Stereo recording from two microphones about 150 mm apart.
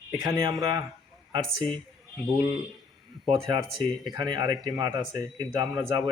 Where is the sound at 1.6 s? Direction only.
5° left (ahead or behind).